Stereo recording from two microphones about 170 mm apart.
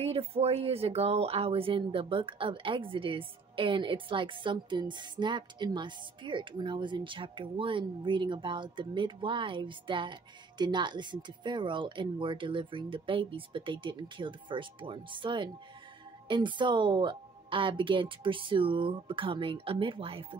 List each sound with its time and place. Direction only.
0.0 s speech: 35° right (ahead or behind)